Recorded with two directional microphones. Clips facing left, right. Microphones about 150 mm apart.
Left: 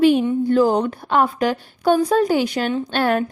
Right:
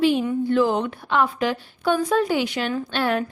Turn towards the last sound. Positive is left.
turn(degrees=50)  # may be behind; listen again after turning